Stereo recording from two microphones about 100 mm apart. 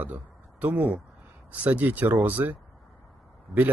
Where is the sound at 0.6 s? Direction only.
15° right (ahead or behind).